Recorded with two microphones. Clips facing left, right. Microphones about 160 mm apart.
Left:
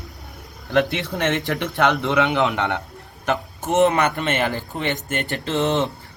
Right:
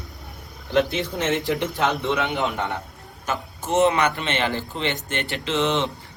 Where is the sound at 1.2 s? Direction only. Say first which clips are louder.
Left 2 dB; 75° left (ahead or behind).